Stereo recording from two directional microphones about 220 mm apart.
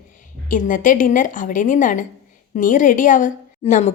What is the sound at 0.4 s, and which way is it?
A woman's voice, 35° left (ahead or behind).